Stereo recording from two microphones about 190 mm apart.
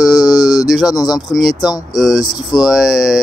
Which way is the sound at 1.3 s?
Centre (ahead or behind).